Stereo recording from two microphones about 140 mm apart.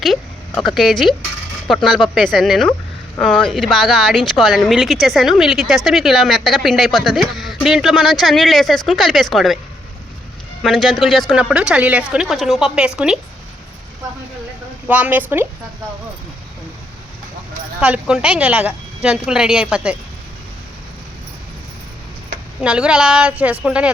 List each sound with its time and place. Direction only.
0.0 s speech: centre (ahead or behind)
10.6 s speech: centre (ahead or behind)
14.8 s a woman's voice: 10° right (ahead or behind)
17.7 s a woman's voice: 10° right (ahead or behind)
22.6 s a woman's voice: 5° right (ahead or behind)